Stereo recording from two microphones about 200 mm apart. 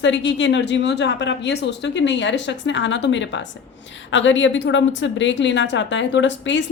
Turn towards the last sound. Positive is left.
turn(degrees=65)  # may be behind; listen again after turning